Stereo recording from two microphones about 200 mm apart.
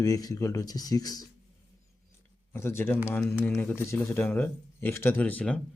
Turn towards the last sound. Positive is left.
turn(degrees=5)  # may be behind; listen again after turning